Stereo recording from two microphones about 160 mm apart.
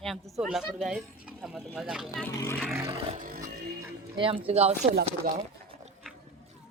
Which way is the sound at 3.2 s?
65° right (ahead or behind).